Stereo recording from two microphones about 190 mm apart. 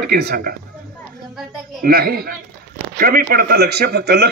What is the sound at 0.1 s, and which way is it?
Speech, 55° right (ahead or behind).